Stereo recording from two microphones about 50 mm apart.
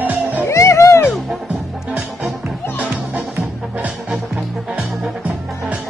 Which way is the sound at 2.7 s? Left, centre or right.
Right.